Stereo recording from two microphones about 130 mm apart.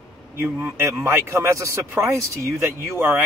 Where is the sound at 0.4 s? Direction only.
15° right (ahead or behind).